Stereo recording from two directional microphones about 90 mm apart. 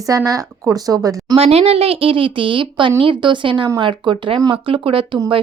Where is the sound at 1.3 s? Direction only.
90° right.